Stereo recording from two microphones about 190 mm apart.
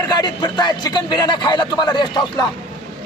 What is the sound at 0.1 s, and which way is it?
Speech, 20° left (ahead or behind).